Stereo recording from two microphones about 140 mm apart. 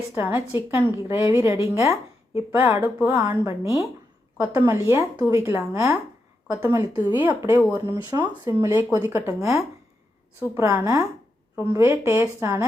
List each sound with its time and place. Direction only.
0.1 s a woman's voice: 20° right (ahead or behind)